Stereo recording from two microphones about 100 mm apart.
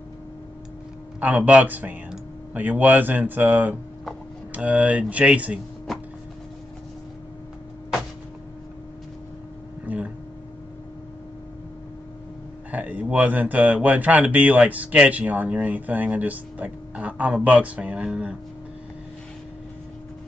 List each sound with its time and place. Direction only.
1.2 s speech: 15° right (ahead or behind)
9.8 s a sound: 15° right (ahead or behind)
12.7 s speech: 15° right (ahead or behind)